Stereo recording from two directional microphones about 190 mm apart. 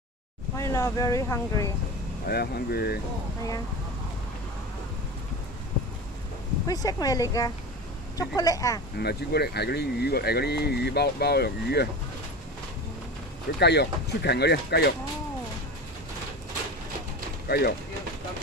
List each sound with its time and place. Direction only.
0.6 s speech: 15° left (ahead or behind)
2.2 s speech: 55° left (ahead or behind)
6.7 s speech: 20° left (ahead or behind)
8.9 s speech: 55° left (ahead or behind)
13.6 s speech: 60° left (ahead or behind)
17.5 s speech: 55° left (ahead or behind)